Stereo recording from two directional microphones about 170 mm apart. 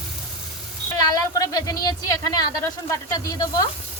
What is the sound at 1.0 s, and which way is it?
Speech, 20° left (ahead or behind).